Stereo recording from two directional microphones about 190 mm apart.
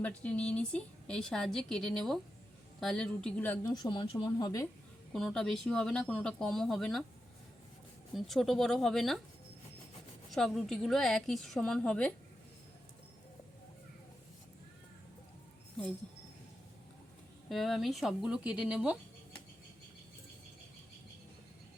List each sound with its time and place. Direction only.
0.0 s a woman's voice: 5° left (ahead or behind)
3.7 s speech: 20° left (ahead or behind)
5.1 s a woman's voice: centre (ahead or behind)
8.1 s a woman's voice: centre (ahead or behind)
10.2 s a woman's voice: centre (ahead or behind)
17.5 s a woman's voice: centre (ahead or behind)